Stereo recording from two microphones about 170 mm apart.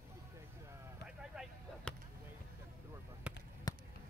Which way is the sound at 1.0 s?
5° right (ahead or behind).